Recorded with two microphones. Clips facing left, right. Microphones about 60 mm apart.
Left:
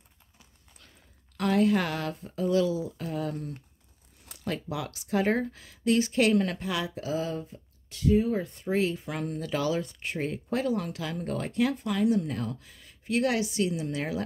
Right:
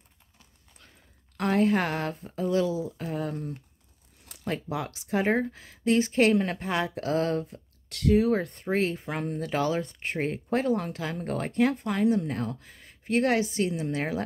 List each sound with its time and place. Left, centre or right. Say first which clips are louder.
1.3 s speech: even; right
4.5 s speech: right 2 dB; right